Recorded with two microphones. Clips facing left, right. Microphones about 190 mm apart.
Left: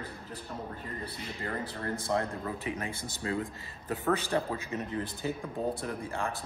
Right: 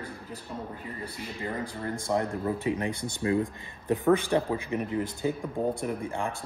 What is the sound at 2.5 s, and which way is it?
Speech, 30° right (ahead or behind).